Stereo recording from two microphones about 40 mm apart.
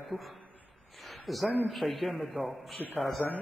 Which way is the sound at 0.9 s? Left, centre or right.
Centre.